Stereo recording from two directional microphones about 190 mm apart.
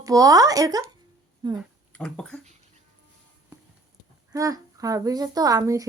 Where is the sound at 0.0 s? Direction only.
20° right (ahead or behind).